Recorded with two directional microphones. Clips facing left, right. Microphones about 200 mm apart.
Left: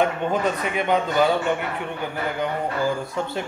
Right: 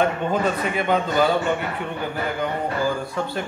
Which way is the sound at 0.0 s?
15° left (ahead or behind).